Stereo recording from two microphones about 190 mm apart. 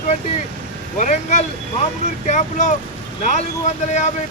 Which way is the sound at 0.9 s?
40° left (ahead or behind).